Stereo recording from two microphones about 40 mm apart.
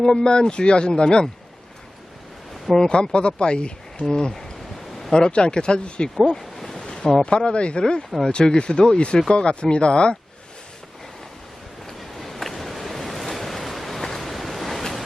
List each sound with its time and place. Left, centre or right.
0.0 s speech: centre
2.6 s speech: centre
2.9 s speech: left
6.4 s a sound: centre
7.3 s speech: left
11.9 s waves: centre